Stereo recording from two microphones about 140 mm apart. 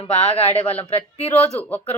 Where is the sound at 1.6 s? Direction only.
10° left (ahead or behind).